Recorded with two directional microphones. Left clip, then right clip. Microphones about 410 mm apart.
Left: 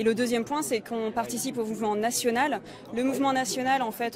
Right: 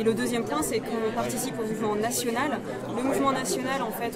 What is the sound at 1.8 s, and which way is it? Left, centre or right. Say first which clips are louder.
A woman's voice: left 1 dB; right.